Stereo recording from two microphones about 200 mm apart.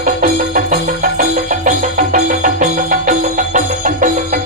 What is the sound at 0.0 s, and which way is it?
Music, 40° right (ahead or behind).